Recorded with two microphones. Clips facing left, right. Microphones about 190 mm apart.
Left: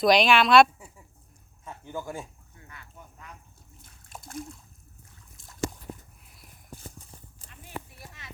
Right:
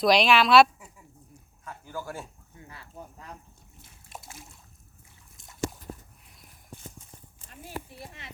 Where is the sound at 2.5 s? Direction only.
30° right (ahead or behind).